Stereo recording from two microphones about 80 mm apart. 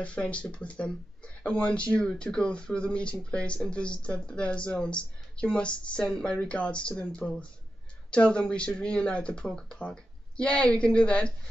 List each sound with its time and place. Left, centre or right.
0.0 s speech: centre